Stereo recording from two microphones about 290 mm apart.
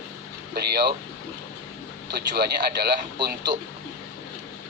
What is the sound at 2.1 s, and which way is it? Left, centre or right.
Speech, right.